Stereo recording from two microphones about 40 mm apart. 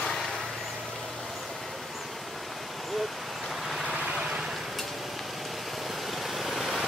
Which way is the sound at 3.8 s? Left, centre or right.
Centre.